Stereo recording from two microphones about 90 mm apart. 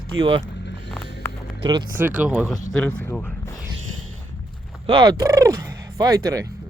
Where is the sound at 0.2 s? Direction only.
70° right (ahead or behind).